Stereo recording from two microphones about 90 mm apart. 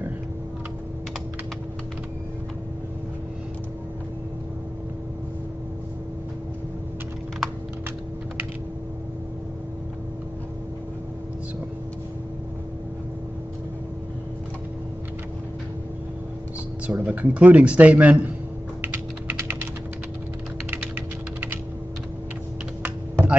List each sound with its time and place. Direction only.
16.8 s speech: 15° right (ahead or behind)
22.8 s typing: 15° right (ahead or behind)